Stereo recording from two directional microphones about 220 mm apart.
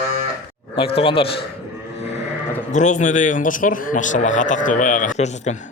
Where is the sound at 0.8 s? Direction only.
25° left (ahead or behind).